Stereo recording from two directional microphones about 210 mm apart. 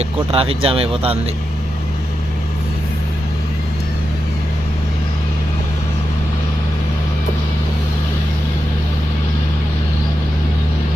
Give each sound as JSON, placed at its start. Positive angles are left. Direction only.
{"t": 0.0, "sound": "speech", "side_deg": -25}